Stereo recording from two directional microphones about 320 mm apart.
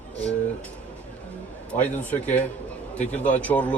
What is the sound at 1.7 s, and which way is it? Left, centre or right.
Speech, centre.